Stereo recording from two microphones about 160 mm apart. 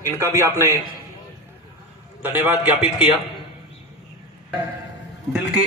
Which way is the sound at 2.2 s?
10° right (ahead or behind).